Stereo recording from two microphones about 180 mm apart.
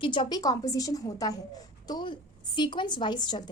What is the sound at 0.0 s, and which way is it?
A woman's voice, 25° left (ahead or behind).